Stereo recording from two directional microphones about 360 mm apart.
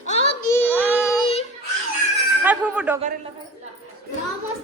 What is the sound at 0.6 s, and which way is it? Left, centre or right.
Child singing, centre.